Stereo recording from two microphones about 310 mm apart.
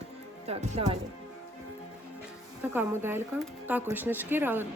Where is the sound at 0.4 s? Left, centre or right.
Centre.